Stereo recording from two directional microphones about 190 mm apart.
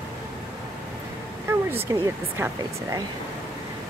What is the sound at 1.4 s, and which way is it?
Speech, 10° right (ahead or behind).